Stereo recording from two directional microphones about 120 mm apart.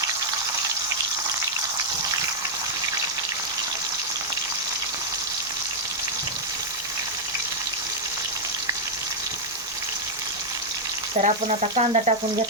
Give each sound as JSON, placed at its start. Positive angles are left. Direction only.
{"t": 11.2, "sound": "speech", "side_deg": -70}